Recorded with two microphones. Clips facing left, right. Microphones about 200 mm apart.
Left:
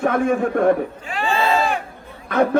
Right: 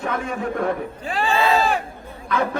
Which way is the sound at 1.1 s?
35° right (ahead or behind).